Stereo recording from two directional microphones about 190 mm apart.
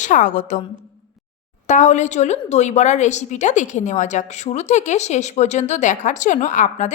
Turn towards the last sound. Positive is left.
turn(degrees=40)  # may be behind; listen again after turning